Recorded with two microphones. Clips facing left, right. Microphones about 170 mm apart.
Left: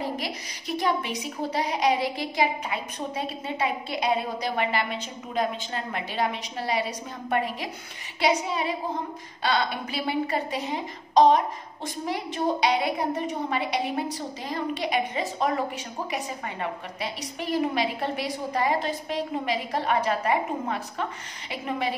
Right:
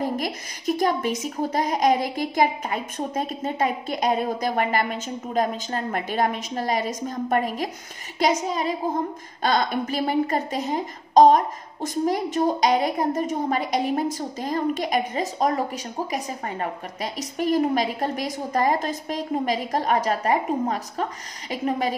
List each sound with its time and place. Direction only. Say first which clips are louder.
0.0 s a woman's voice: right 5 dB; 45° right (ahead or behind)